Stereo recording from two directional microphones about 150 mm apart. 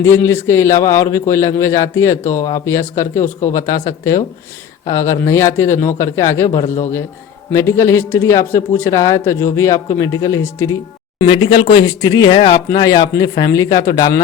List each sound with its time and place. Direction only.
0.0 s a man's voice: 15° left (ahead or behind)
11.3 s a man's voice: 35° left (ahead or behind)